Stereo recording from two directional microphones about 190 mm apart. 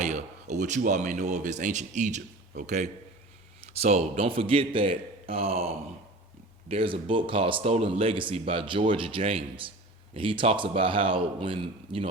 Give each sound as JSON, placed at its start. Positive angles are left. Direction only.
{"t": 0.0, "sound": "a man's voice", "side_deg": -40}